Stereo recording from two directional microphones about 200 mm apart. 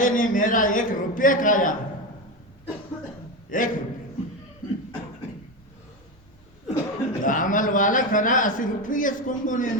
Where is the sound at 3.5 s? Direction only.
40° left (ahead or behind).